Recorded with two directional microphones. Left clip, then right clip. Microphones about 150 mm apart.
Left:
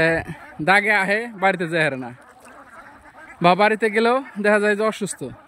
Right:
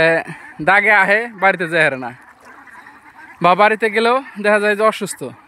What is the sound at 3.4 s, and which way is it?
Speech, 15° left (ahead or behind).